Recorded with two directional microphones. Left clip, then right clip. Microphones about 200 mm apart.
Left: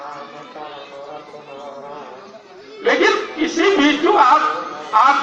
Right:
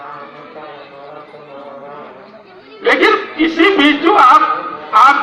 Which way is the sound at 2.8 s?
30° left (ahead or behind).